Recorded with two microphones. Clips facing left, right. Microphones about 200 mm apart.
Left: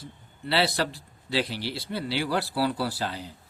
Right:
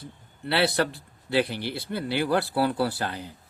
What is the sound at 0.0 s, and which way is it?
A man's voice, 55° right (ahead or behind).